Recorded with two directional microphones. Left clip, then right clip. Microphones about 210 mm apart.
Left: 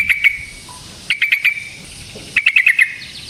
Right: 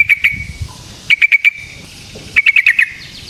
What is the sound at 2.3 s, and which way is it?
Bird, 20° right (ahead or behind).